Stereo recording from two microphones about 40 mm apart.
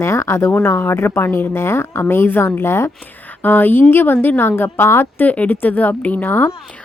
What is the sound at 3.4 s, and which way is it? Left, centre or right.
A woman's voice, left.